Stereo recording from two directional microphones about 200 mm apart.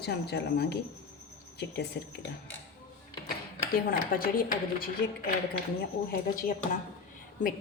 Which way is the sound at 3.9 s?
45° left (ahead or behind).